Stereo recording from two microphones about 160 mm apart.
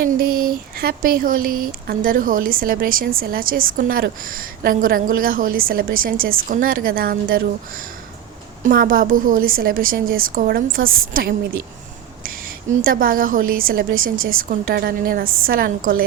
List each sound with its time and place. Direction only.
0.0 s speech: 65° right (ahead or behind)